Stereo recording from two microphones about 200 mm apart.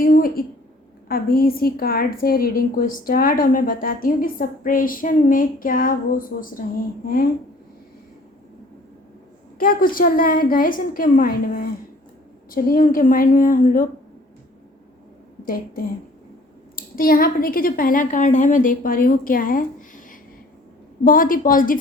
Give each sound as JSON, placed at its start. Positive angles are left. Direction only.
{"t": 0.0, "sound": "a sound", "side_deg": 45}
{"t": 1.0, "sound": "a woman's voice", "side_deg": 50}
{"t": 9.6, "sound": "a woman's voice", "side_deg": 45}
{"t": 15.4, "sound": "a woman's voice", "side_deg": 45}
{"t": 21.0, "sound": "a woman's voice", "side_deg": 45}